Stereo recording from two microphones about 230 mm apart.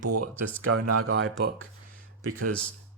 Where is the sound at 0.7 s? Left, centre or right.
Right.